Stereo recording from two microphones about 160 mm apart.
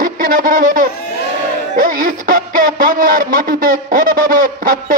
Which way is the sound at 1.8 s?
55° right (ahead or behind).